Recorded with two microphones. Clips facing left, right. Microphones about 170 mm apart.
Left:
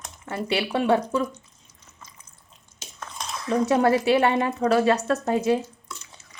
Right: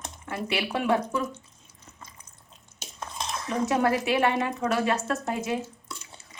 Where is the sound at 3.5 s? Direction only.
30° left (ahead or behind).